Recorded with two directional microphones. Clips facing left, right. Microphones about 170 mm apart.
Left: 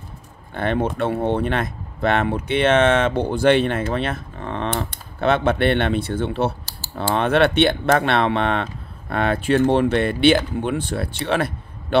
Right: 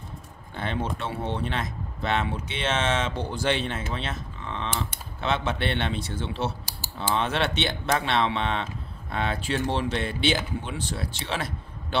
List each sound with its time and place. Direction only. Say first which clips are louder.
0.6 s speech: left 9 dB; 55° left (ahead or behind)